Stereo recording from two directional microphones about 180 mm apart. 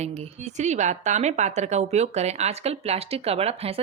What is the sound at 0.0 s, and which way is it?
A woman's voice, 40° right (ahead or behind).